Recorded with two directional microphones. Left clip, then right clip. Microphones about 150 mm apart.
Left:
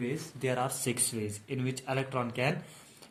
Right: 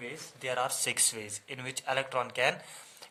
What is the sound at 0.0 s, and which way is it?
Speech, 15° right (ahead or behind).